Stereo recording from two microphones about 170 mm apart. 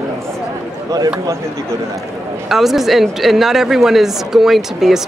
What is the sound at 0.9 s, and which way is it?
Speech, 20° right (ahead or behind).